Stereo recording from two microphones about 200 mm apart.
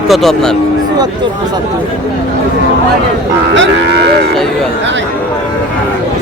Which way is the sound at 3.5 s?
65° right (ahead or behind).